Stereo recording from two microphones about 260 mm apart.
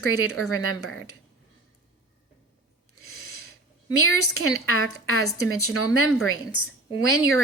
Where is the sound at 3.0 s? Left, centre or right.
Left.